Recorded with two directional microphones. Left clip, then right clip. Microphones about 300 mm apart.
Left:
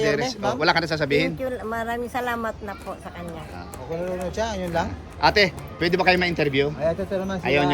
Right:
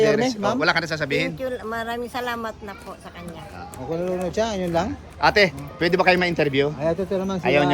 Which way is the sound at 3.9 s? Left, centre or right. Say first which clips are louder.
Right 3 dB; right.